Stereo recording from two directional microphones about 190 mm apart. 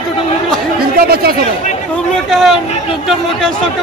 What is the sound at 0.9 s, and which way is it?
Speech, 55° right (ahead or behind).